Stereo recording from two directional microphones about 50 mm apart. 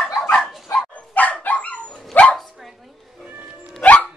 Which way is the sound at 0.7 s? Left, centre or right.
Left.